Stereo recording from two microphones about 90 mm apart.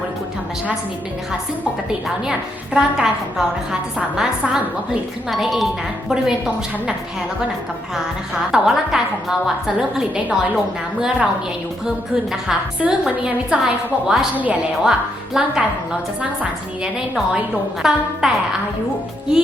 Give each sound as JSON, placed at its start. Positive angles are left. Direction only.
{"t": 2.7, "sound": "a woman's voice", "side_deg": -5}
{"t": 8.5, "sound": "a woman's voice", "side_deg": -5}
{"t": 12.3, "sound": "a woman's voice", "side_deg": -10}